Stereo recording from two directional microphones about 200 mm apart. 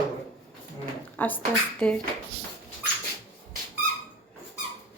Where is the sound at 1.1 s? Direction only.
10° left (ahead or behind).